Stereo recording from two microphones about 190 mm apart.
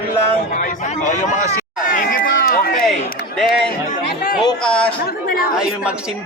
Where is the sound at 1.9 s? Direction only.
45° left (ahead or behind).